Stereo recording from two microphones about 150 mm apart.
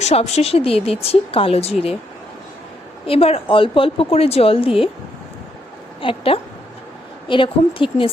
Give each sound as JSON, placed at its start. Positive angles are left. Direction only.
{"t": 0.0, "sound": "speech", "side_deg": 45}
{"t": 3.1, "sound": "speech", "side_deg": 40}
{"t": 6.0, "sound": "speech", "side_deg": 35}